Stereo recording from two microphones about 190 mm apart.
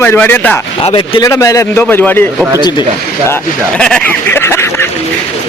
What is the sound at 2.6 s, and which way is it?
Speech, 25° left (ahead or behind).